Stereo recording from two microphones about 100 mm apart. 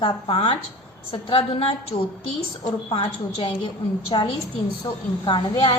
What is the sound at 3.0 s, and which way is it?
A woman's voice, 50° left (ahead or behind).